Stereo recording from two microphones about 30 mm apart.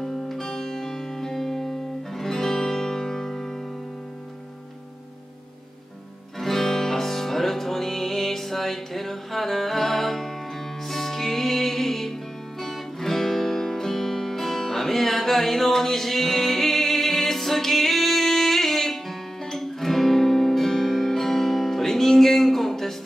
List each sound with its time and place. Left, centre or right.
0.0 s music: centre
6.4 s music: centre